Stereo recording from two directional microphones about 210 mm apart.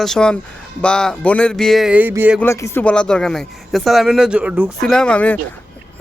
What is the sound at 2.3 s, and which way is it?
Speech, 15° left (ahead or behind).